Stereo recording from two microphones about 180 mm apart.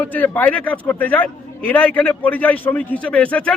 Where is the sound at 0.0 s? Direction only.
10° left (ahead or behind).